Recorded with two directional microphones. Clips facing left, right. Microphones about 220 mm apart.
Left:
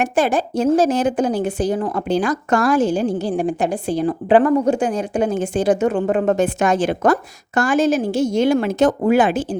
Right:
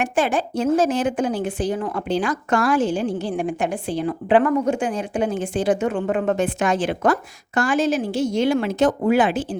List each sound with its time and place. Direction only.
0.0 s speech: 40° left (ahead or behind)